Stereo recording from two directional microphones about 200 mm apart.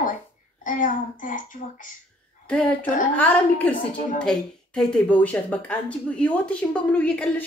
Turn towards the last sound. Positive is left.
turn(degrees=5)  # may be behind; listen again after turning